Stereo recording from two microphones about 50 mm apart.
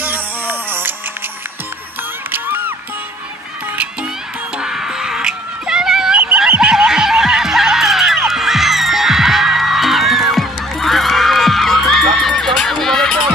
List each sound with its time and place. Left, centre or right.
0.0 s music: right
2.3 s music: right
4.6 s a sound: centre
6.6 s snicker: centre
8.3 s music: centre